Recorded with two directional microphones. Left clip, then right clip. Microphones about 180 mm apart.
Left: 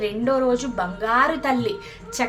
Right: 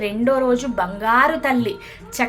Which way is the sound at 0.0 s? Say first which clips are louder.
Right 2 dB; 25° right (ahead or behind).